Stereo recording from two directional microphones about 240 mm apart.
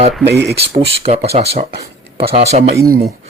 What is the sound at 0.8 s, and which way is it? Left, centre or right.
Speech, right.